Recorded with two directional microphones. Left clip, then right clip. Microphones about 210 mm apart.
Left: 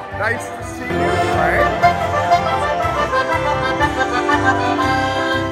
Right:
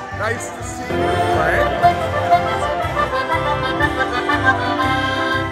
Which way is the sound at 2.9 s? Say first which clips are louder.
Left 1 dB; 30° left (ahead or behind).